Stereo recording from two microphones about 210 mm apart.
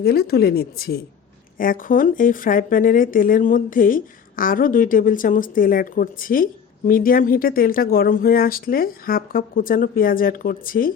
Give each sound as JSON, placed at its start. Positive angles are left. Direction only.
{"t": 0.0, "sound": "a woman's voice", "side_deg": 50}